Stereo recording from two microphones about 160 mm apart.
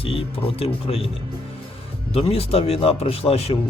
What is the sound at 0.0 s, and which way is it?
A man's voice, 35° left (ahead or behind).